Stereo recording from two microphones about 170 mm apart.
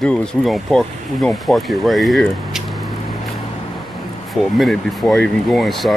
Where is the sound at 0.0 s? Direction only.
5° left (ahead or behind).